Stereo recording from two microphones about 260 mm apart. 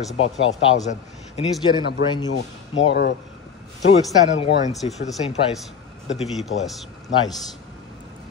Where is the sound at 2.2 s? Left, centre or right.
Left.